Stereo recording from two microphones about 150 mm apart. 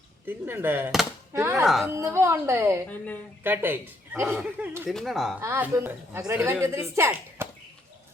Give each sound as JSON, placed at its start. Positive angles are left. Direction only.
{"t": 0.3, "sound": "a woman's voice", "side_deg": -15}
{"t": 1.6, "sound": "speech", "side_deg": 0}
{"t": 2.0, "sound": "a woman's voice", "side_deg": -15}
{"t": 4.9, "sound": "speech", "side_deg": 0}
{"t": 5.4, "sound": "a woman's voice", "side_deg": -15}